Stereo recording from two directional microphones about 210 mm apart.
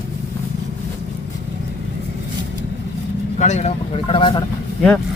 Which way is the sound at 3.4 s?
35° left (ahead or behind).